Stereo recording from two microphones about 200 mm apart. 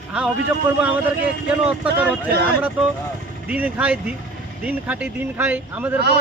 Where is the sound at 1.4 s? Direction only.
5° right (ahead or behind).